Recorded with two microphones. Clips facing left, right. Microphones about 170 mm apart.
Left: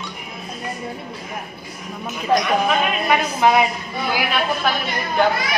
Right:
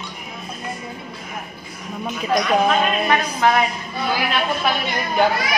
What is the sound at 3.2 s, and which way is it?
Speech, 15° left (ahead or behind).